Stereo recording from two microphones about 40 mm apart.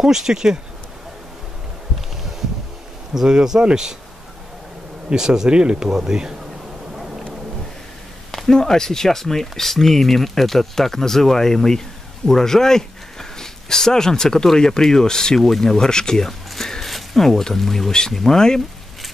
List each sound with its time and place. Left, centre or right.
0.0 s speech: centre
3.2 s speech: centre
5.1 s speech: centre
8.3 s speech: centre